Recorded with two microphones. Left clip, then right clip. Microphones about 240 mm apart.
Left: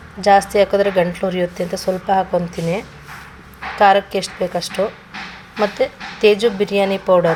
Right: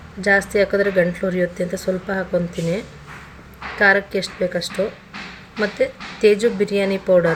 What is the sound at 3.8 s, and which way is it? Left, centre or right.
Speech, left.